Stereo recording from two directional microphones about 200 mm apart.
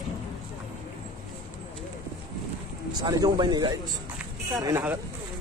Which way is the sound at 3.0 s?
20° right (ahead or behind).